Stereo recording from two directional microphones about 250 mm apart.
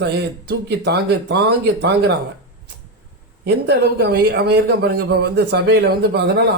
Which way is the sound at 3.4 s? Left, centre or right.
Right.